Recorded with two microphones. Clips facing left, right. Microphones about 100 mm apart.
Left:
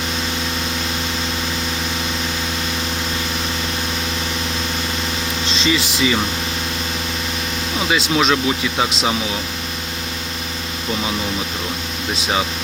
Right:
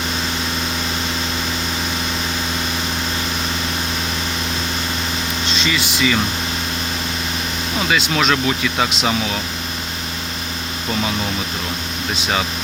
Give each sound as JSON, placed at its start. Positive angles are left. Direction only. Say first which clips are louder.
{"t": 5.5, "sound": "speech", "louder": "left 3 dB", "side_deg": 30}
{"t": 8.1, "sound": "speech", "louder": "left 1 dB", "side_deg": 15}